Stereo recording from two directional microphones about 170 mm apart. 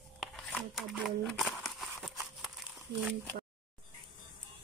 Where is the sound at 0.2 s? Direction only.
Centre (ahead or behind).